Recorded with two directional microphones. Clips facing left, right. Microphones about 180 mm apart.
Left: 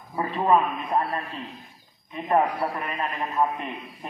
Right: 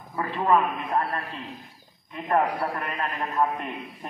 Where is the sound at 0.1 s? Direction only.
20° left (ahead or behind).